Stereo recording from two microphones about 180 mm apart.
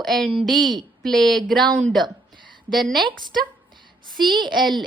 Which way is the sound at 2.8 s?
Centre (ahead or behind).